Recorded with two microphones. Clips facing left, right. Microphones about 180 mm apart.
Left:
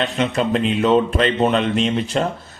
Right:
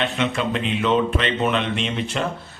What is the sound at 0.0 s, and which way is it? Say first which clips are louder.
Speech: left 3 dB; 40° left (ahead or behind).